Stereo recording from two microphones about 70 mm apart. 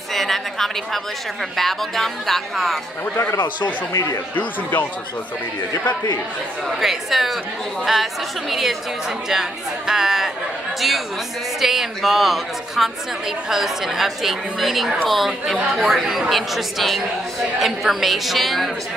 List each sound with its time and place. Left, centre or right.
0.1 s a woman's voice: centre
3.9 s speech: left
4.4 s speech: left
5.7 s speech: left
6.8 s a woman's voice: centre
11.6 s a woman's voice: centre